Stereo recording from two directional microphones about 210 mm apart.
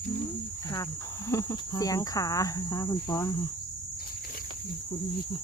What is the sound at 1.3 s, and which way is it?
Speech, 15° left (ahead or behind).